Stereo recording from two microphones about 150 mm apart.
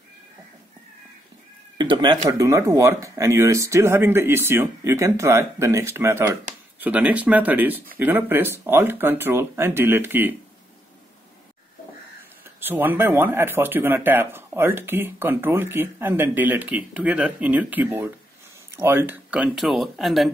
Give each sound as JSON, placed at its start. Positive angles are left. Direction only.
{"t": 1.8, "sound": "speech", "side_deg": -30}
{"t": 12.5, "sound": "speech", "side_deg": -15}